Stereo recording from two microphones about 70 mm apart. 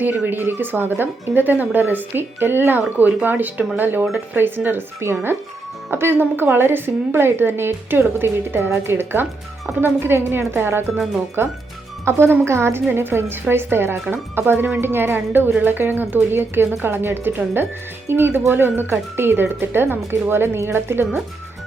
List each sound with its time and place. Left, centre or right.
0.3 s speech: right
10.9 s speech: centre
12.0 s speech: right